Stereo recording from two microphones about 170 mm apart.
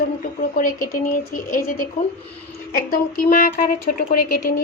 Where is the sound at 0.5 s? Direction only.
55° left (ahead or behind).